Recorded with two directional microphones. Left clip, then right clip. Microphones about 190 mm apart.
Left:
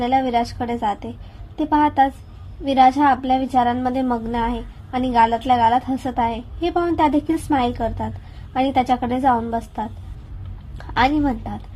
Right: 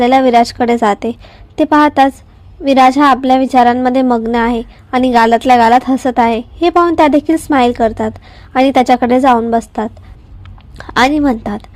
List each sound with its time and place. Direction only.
0.0 s a woman's voice: 50° right (ahead or behind)